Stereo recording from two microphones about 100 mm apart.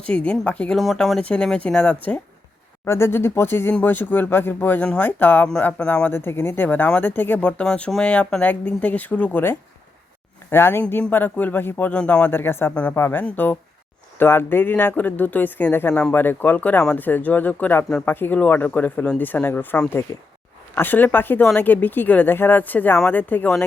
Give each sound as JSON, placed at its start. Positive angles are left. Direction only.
{"t": 0.0, "sound": "speech", "side_deg": 10}
{"t": 0.8, "sound": "speech", "side_deg": 0}
{"t": 2.8, "sound": "speech", "side_deg": 25}
{"t": 20.1, "sound": "speech", "side_deg": 35}
{"t": 20.7, "sound": "speech", "side_deg": 20}